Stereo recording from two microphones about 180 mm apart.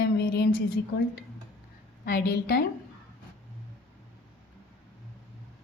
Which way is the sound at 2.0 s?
55° left (ahead or behind).